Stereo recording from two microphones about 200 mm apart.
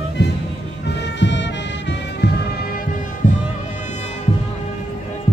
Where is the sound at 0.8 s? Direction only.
60° left (ahead or behind).